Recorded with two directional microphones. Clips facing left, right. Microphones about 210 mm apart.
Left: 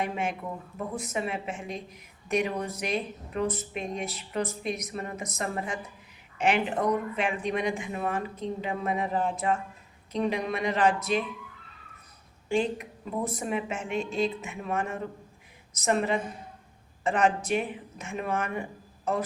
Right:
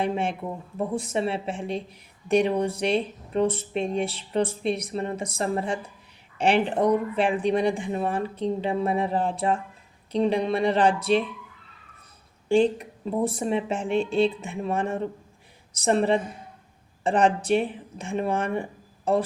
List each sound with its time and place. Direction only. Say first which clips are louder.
0.0 s speech: right 4 dB; 30° right (ahead or behind)
12.5 s speech: right 7 dB; 35° right (ahead or behind)